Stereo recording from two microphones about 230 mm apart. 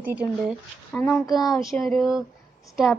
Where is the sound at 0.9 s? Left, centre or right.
Centre.